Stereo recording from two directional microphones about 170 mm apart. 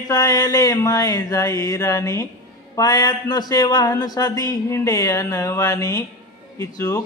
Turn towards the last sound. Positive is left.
turn(degrees=20)  # may be behind; listen again after turning